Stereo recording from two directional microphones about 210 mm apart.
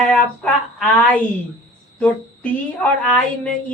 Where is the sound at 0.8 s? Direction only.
5° left (ahead or behind).